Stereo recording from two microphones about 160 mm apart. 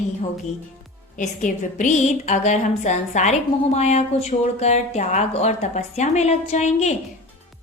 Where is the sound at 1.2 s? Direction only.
55° left (ahead or behind).